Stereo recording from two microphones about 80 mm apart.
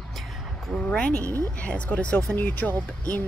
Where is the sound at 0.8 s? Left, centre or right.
Centre.